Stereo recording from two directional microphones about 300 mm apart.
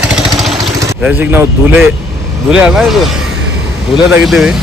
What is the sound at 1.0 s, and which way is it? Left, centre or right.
Speech, centre.